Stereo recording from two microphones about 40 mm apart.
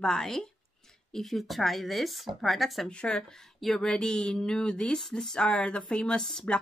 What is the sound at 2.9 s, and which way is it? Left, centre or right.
A woman's voice, left.